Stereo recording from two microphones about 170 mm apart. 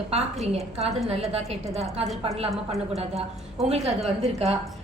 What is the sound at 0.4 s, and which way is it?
A woman's voice, 35° right (ahead or behind).